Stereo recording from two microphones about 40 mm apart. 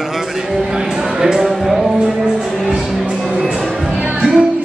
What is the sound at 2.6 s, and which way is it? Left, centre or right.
Music, centre.